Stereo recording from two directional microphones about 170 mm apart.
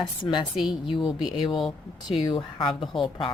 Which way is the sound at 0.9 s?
30° left (ahead or behind).